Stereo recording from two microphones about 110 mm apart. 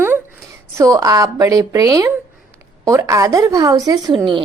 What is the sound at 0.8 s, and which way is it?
A woman's voice, 30° right (ahead or behind).